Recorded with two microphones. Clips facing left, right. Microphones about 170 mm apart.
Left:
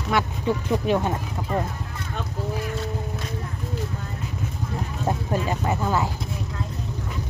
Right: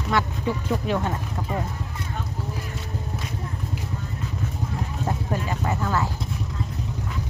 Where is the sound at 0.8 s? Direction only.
15° left (ahead or behind).